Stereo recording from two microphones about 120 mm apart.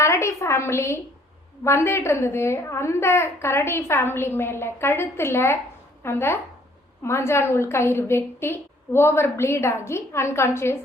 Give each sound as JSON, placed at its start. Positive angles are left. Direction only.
{"t": 0.0, "sound": "a woman's voice", "side_deg": 25}